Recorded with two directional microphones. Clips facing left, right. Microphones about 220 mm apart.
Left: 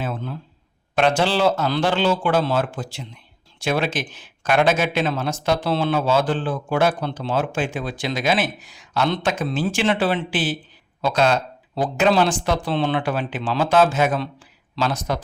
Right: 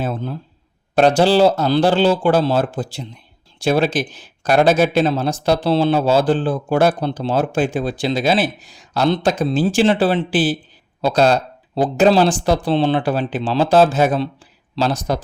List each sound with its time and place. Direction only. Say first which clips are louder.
0.0 s a man's voice: right 4 dB; 35° right (ahead or behind)